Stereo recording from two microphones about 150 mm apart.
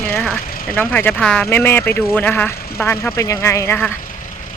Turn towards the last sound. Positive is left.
turn(degrees=15)  # may be behind; listen again after turning